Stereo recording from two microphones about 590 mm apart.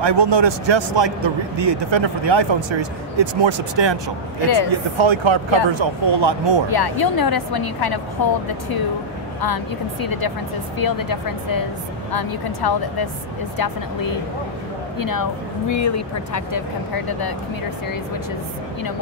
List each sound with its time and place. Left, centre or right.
0.0 s a man's voice: right
6.7 s speech: left
15.0 s speech: left